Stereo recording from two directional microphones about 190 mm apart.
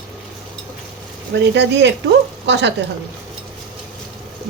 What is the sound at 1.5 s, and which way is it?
Speech, 65° right (ahead or behind).